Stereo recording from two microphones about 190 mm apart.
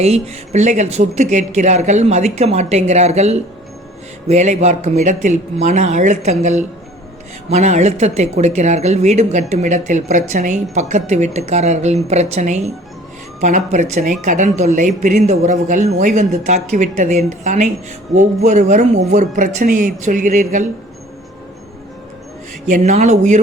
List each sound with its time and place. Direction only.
0.0 s speech: 35° right (ahead or behind)
22.6 s speech: 40° right (ahead or behind)